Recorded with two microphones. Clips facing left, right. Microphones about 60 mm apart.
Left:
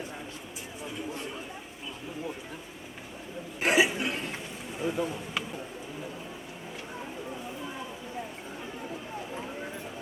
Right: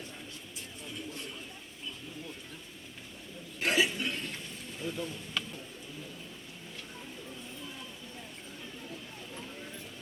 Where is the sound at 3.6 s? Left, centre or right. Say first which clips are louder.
Left 5 dB; centre.